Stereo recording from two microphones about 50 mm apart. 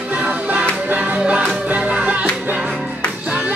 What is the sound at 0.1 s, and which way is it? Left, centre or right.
Music, right.